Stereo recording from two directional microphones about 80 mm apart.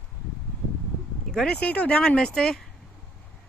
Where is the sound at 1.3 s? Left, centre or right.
Centre.